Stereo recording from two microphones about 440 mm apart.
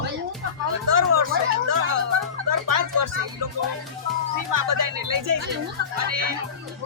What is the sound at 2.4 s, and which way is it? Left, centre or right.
Speech, right.